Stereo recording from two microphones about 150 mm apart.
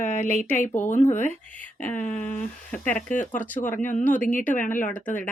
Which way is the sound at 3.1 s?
60° left (ahead or behind).